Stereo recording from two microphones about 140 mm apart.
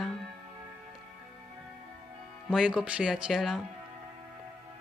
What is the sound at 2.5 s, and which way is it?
Speech, 5° right (ahead or behind).